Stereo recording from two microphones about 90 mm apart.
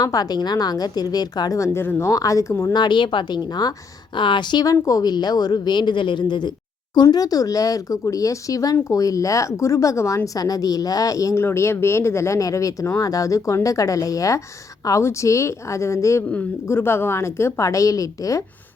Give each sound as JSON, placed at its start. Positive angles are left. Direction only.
{"t": 0.0, "sound": "a woman's voice", "side_deg": 45}
{"t": 2.7, "sound": "speech", "side_deg": 60}
{"t": 4.6, "sound": "a woman's voice", "side_deg": 45}
{"t": 11.4, "sound": "speech", "side_deg": 30}